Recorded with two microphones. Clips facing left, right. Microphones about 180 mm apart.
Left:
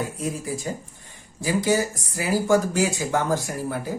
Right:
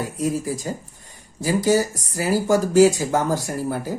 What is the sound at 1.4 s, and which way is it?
Speech, 40° right (ahead or behind).